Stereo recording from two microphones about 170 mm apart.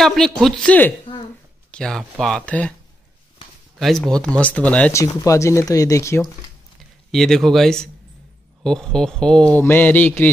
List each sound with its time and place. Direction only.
0.0 s speech: centre (ahead or behind)
3.8 s speech: 5° left (ahead or behind)
4.9 s speech: 20° left (ahead or behind)
7.1 s speech: centre (ahead or behind)